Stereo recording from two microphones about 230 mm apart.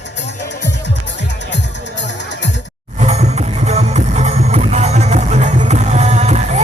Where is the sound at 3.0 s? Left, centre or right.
Right.